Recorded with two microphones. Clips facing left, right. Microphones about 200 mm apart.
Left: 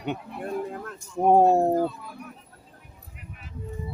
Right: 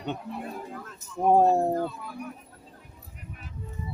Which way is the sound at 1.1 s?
20° left (ahead or behind).